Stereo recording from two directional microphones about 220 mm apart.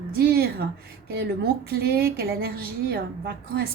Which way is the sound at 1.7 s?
45° right (ahead or behind).